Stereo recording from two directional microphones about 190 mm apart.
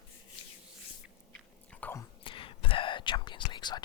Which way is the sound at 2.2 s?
25° left (ahead or behind).